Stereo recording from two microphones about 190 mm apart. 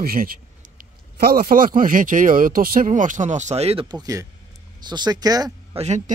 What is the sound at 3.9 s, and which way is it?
Speech, 20° right (ahead or behind).